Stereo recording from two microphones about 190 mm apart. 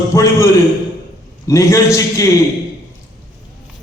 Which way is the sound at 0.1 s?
15° left (ahead or behind).